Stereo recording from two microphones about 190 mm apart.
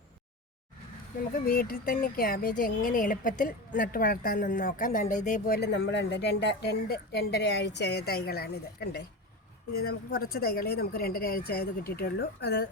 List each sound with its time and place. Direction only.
1.5 s speech: 50° left (ahead or behind)
5.5 s a woman's voice: 60° left (ahead or behind)